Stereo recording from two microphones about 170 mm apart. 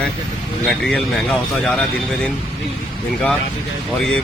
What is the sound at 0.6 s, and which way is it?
Speech, centre (ahead or behind).